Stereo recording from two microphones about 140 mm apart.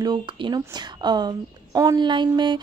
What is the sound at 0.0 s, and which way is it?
Speech, 30° right (ahead or behind).